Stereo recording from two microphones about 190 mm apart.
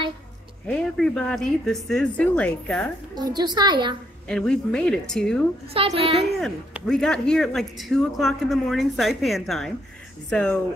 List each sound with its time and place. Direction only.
0.7 s speech: 5° left (ahead or behind)
3.2 s a woman's voice: 20° right (ahead or behind)
4.3 s speech: 5° left (ahead or behind)
5.7 s a woman's voice: 30° right (ahead or behind)
6.4 s speech: centre (ahead or behind)